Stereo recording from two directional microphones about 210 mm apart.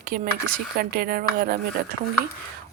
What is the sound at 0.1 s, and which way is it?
Speech, 45° right (ahead or behind).